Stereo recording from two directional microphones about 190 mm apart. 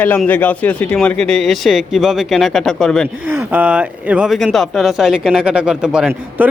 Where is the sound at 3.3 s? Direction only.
10° right (ahead or behind).